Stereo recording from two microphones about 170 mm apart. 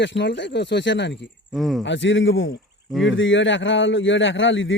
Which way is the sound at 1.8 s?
90° left.